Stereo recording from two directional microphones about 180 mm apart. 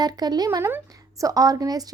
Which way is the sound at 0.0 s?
20° right (ahead or behind).